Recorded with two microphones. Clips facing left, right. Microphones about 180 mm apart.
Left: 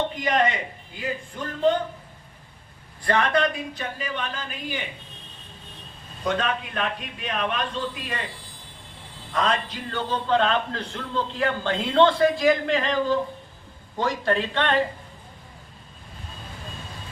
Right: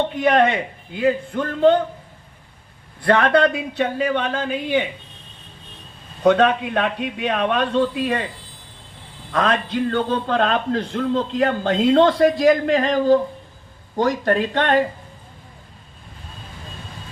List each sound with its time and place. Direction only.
0.2 s a man's voice: 60° right (ahead or behind)
3.0 s a man's voice: 60° right (ahead or behind)
6.2 s speech: 65° right (ahead or behind)
9.3 s a man's voice: 60° right (ahead or behind); by 14.8 s 45° right (ahead or behind)